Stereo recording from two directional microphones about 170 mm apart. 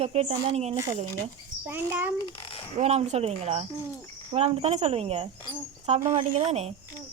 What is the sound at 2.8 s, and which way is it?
A woman's voice, 40° right (ahead or behind).